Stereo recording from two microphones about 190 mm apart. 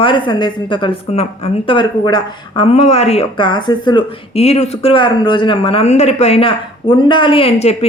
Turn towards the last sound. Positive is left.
turn(degrees=35)  # may be behind; listen again after turning